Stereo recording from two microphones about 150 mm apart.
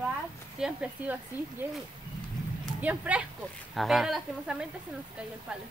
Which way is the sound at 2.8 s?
10° right (ahead or behind).